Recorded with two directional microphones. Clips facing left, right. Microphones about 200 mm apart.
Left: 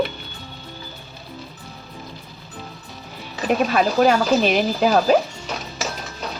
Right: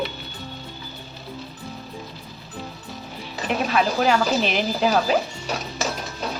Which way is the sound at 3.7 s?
45° left (ahead or behind).